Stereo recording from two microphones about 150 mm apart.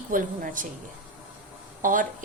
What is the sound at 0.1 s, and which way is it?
Speech, 65° right (ahead or behind).